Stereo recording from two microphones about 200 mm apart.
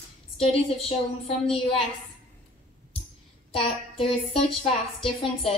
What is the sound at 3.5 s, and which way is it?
A woman's voice, 25° left (ahead or behind).